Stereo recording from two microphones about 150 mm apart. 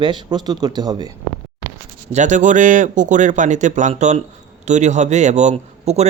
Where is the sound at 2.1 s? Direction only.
55° right (ahead or behind).